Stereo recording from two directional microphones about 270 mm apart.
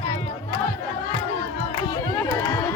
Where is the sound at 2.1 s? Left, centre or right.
Centre.